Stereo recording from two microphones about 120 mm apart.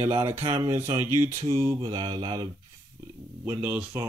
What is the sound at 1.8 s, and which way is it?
Mantra, 40° right (ahead or behind).